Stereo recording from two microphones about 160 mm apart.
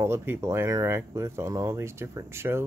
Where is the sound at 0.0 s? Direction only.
15° right (ahead or behind).